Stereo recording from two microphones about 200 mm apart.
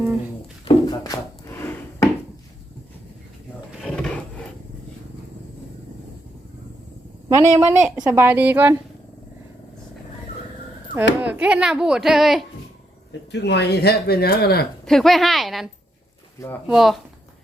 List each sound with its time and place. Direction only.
0.6 s wood: 20° left (ahead or behind)
3.8 s drawer open or close: centre (ahead or behind)
7.3 s a woman's voice: 20° right (ahead or behind)
11.2 s speech: 5° right (ahead or behind)
13.3 s speech: 60° left (ahead or behind)
14.8 s speech: centre (ahead or behind)